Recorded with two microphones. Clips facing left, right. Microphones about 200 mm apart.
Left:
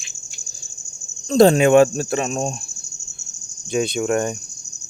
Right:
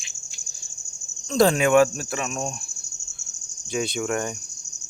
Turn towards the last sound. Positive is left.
turn(degrees=20)  # may be behind; listen again after turning